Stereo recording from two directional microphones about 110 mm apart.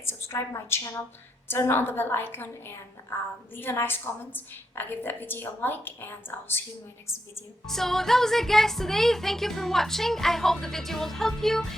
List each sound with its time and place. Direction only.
0.0 s a woman's voice: 25° left (ahead or behind)
7.7 s speech: 5° left (ahead or behind)